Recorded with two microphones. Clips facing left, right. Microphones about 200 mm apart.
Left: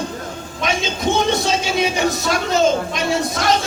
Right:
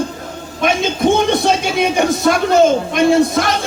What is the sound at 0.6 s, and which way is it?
A man's voice, 55° right (ahead or behind).